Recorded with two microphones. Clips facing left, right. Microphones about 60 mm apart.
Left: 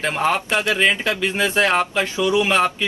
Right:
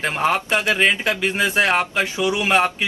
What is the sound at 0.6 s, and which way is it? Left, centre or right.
Speech, right.